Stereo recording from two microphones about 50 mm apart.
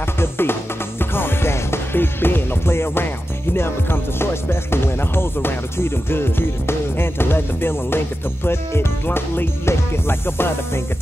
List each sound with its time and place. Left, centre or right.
0.2 s music: left